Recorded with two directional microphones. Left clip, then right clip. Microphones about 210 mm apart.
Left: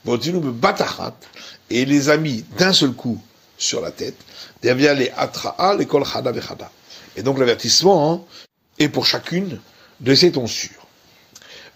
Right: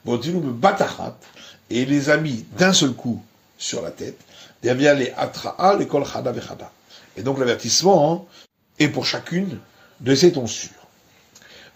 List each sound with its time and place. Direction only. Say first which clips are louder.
0.0 s a man's voice: left 3 dB; 30° left (ahead or behind)